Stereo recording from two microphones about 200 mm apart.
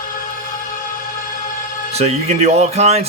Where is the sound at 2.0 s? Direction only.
35° right (ahead or behind).